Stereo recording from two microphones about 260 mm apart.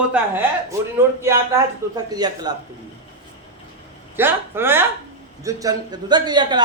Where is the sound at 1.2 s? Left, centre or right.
Centre.